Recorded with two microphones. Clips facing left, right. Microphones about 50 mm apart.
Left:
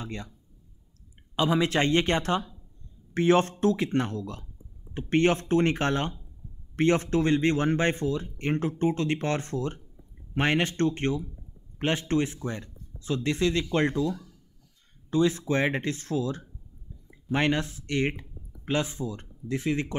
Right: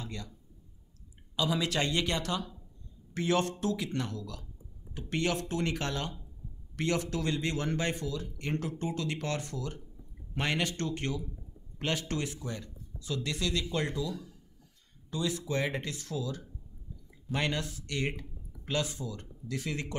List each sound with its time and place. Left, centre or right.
0.0 s speech: left
1.3 s speech: left